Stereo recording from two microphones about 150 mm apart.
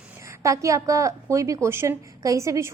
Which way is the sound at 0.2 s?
20° right (ahead or behind).